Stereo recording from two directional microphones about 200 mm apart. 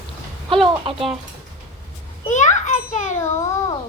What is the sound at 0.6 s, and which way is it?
Speech, 25° right (ahead or behind).